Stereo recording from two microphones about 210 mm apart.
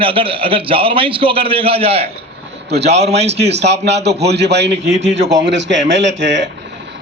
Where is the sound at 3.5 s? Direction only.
55° right (ahead or behind).